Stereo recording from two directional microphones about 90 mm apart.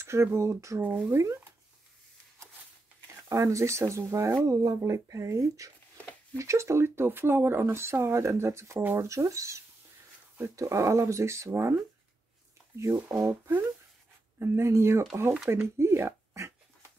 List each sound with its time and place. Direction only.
0.0 s speech: 30° right (ahead or behind)
3.3 s speech: 35° right (ahead or behind)
12.7 s speech: 35° right (ahead or behind)